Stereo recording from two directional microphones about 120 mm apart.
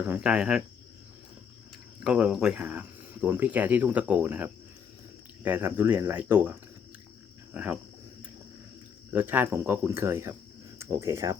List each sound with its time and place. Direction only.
0.1 s speech: 5° right (ahead or behind)
2.0 s speech: 5° right (ahead or behind)
9.1 s speech: 15° right (ahead or behind)
10.8 s cricket: 25° right (ahead or behind)